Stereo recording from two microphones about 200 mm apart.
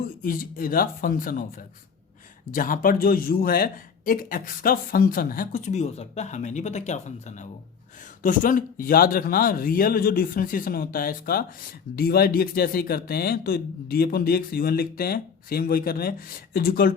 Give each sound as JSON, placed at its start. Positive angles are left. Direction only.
{"t": 0.2, "sound": "a man's voice", "side_deg": 45}